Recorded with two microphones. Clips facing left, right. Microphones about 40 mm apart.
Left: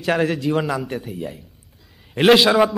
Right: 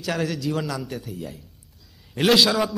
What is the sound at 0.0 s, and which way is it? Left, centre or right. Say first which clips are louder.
A man's voice: left 6 dB; left.